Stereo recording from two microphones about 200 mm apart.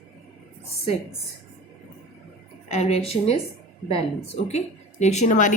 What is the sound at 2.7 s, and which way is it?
Speech, 35° left (ahead or behind).